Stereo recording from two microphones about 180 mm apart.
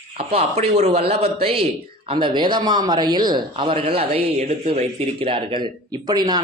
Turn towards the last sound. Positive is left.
turn(degrees=-20)  # may be behind; listen again after turning